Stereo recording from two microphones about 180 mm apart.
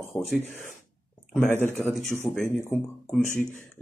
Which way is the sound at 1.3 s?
10° left (ahead or behind).